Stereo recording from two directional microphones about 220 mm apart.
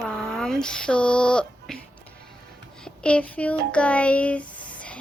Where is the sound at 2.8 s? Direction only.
5° left (ahead or behind).